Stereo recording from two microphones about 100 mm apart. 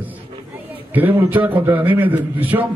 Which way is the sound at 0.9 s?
15° right (ahead or behind).